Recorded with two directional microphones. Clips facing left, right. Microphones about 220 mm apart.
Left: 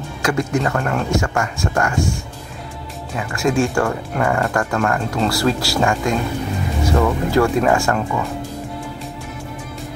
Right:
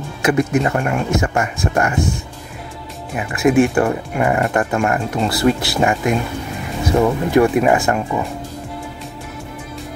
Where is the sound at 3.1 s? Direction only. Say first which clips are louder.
Right 5 dB; 20° right (ahead or behind).